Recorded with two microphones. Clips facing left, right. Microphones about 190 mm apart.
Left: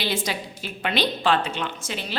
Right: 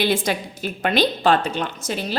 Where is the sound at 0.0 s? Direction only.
50° right (ahead or behind).